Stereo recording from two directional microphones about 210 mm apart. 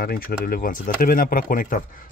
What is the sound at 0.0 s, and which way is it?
Speech, 45° left (ahead or behind).